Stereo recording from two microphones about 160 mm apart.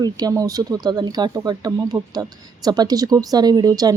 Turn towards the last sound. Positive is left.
turn(degrees=-25)  # may be behind; listen again after turning